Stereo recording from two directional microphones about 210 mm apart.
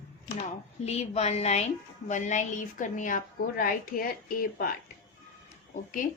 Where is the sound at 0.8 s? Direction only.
30° left (ahead or behind).